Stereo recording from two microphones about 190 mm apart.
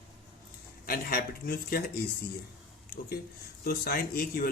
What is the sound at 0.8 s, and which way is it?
Speech, 50° left (ahead or behind).